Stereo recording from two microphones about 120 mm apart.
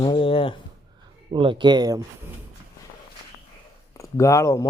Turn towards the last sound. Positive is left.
turn(degrees=25)  # may be behind; listen again after turning